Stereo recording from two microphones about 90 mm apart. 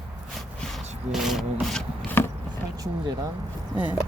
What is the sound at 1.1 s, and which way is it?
Speech, 5° right (ahead or behind).